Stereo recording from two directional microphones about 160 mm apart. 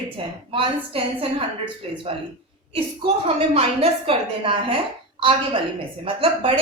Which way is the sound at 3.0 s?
35° right (ahead or behind).